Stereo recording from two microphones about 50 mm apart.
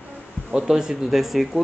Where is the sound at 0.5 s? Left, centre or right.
Centre.